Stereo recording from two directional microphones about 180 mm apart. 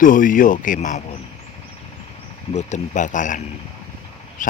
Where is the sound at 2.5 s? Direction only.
40° left (ahead or behind).